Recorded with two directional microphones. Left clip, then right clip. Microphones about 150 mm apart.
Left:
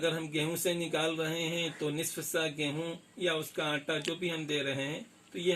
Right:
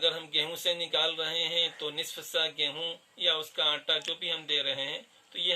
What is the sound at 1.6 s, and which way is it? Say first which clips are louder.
Speech: right 4 dB; 10° right (ahead or behind).